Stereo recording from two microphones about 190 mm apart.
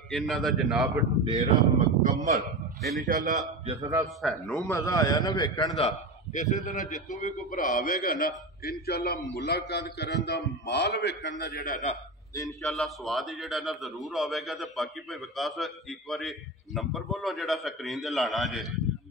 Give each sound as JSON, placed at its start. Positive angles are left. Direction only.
{"t": 0.1, "sound": "a man's voice", "side_deg": 0}
{"t": 1.2, "sound": "speech", "side_deg": -35}
{"t": 3.8, "sound": "speech", "side_deg": -20}
{"t": 4.2, "sound": "a man's voice", "side_deg": 0}
{"t": 4.6, "sound": "a man's voice", "side_deg": 15}
{"t": 6.3, "sound": "a man's voice", "side_deg": 40}
{"t": 12.6, "sound": "a man's voice", "side_deg": 0}